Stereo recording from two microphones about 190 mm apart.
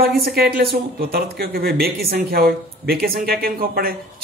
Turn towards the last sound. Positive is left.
turn(degrees=-50)  # may be behind; listen again after turning